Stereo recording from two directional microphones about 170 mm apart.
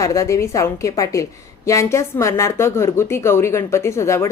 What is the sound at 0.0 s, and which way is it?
A woman's voice, 20° left (ahead or behind).